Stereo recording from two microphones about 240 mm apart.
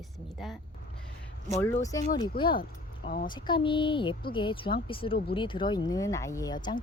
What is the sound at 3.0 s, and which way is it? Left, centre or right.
Speech, left.